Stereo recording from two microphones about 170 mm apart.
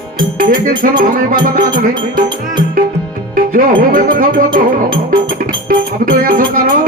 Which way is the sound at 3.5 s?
55° right (ahead or behind).